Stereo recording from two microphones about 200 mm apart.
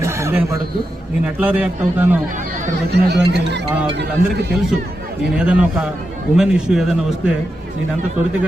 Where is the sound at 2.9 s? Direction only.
60° right (ahead or behind).